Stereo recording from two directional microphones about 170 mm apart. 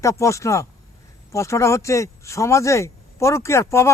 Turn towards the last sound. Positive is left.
turn(degrees=15)  # may be behind; listen again after turning